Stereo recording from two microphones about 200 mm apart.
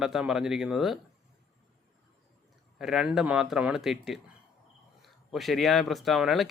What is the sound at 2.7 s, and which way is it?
Speech, centre (ahead or behind).